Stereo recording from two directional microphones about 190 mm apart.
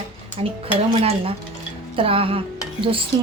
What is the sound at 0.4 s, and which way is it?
A woman's voice, 30° right (ahead or behind).